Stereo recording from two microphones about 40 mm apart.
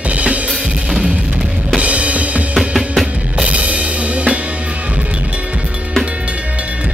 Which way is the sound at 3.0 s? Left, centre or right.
Right.